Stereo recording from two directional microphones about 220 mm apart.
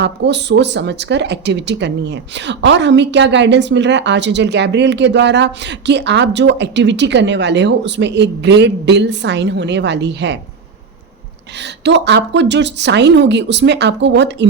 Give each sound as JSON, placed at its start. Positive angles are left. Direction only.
{"t": 0.0, "sound": "speech", "side_deg": -50}
{"t": 11.6, "sound": "speech", "side_deg": -50}